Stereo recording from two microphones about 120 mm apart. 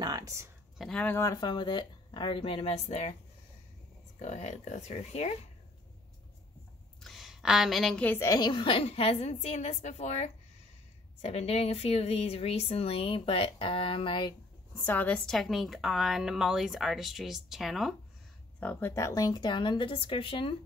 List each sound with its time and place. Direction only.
0.0 s a sound: 30° right (ahead or behind)
0.7 s speech: 5° left (ahead or behind)
1.2 s a woman's voice: 35° left (ahead or behind); by 3.2 s 70° left (ahead or behind)
4.2 s speech: 70° left (ahead or behind)
7.0 s a sound: centre (ahead or behind)
8.0 s speech: 15° left (ahead or behind)
8.3 s speech: 40° left (ahead or behind)
14.8 s a woman's voice: 15° left (ahead or behind); by 17.9 s centre (ahead or behind)
18.6 s a woman's voice: 15° left (ahead or behind); by 20.5 s 45° left (ahead or behind)